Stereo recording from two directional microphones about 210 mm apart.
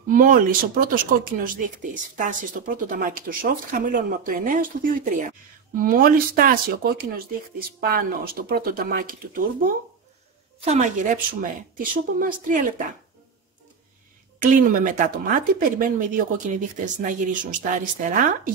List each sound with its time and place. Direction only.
0.1 s speech: 40° right (ahead or behind)
14.4 s speech: 40° right (ahead or behind)